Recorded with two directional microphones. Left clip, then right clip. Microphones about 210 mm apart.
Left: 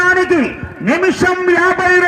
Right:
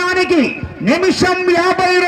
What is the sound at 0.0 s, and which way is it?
A man's voice, 30° left (ahead or behind).